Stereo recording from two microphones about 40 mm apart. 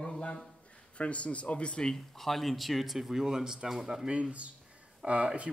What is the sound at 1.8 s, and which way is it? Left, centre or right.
Speech, centre.